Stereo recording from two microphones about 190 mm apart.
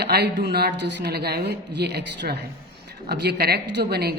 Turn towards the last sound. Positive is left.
turn(degrees=-55)  # may be behind; listen again after turning